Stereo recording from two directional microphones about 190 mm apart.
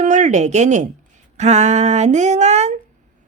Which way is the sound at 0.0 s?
40° right (ahead or behind).